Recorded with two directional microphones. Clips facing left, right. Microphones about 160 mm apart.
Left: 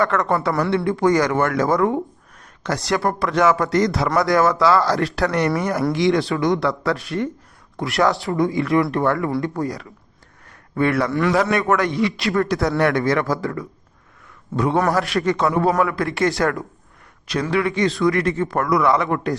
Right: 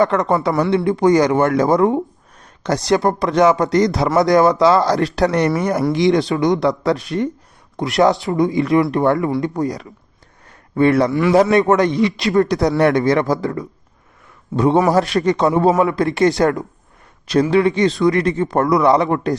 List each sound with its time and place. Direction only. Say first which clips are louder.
0.0 s speech: right 4 dB; 20° right (ahead or behind)